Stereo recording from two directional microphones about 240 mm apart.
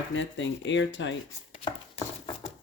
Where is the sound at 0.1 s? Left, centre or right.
Left.